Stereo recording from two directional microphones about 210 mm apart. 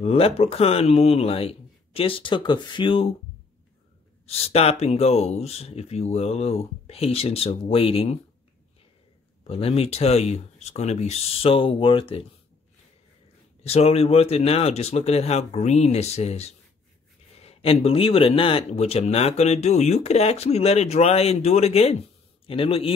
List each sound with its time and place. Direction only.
0.0 s speech: 30° left (ahead or behind)
4.3 s speech: 30° left (ahead or behind)
9.5 s speech: 25° left (ahead or behind)
13.7 s speech: 30° left (ahead or behind)